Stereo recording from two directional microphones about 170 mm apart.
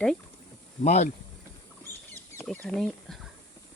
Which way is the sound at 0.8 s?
40° left (ahead or behind).